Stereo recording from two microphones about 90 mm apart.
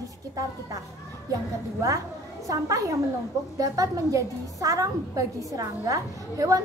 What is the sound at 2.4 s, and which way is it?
A child's voice, 40° right (ahead or behind).